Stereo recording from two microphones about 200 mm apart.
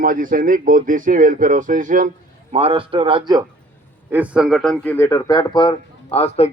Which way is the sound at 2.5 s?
30° right (ahead or behind).